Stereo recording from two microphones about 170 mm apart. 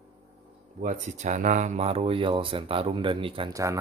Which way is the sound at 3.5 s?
20° right (ahead or behind).